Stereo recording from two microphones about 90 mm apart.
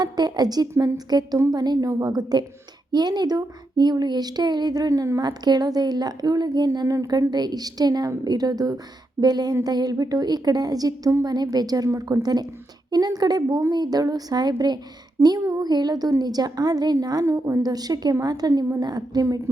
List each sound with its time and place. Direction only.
0.0 s a sound: 50° right (ahead or behind)
0.9 s speech: 45° right (ahead or behind)
6.7 s speech: 40° right (ahead or behind)
17.2 s speech: 35° right (ahead or behind)